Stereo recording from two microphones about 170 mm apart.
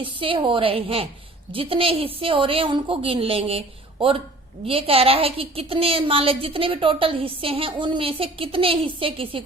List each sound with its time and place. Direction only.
0.0 s a woman's voice: 30° right (ahead or behind)